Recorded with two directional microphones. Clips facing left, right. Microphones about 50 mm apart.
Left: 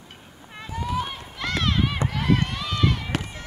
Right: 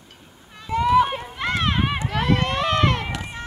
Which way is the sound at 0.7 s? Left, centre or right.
Right.